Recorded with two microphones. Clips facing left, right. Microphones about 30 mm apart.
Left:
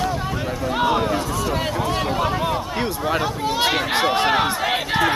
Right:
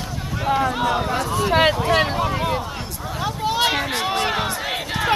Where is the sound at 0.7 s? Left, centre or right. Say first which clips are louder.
Left 2 dB; centre.